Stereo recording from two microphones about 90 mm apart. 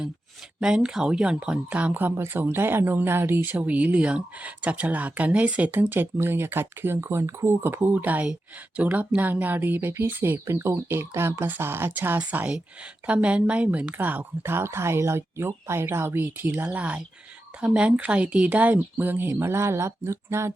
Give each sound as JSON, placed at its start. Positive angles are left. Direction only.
{"t": 0.6, "sound": "speech", "side_deg": -10}